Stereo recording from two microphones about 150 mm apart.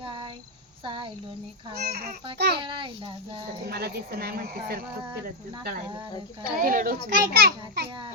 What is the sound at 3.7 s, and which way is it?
Speech, 90° right.